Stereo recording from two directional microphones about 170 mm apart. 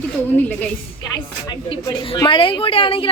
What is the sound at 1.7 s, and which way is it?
A woman's voice, 30° left (ahead or behind).